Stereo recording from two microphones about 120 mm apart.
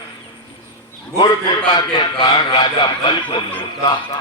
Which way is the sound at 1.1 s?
35° left (ahead or behind).